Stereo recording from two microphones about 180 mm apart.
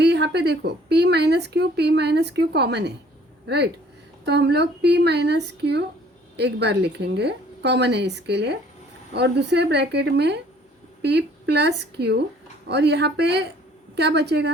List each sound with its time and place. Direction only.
0.0 s a woman's voice: 70° right (ahead or behind)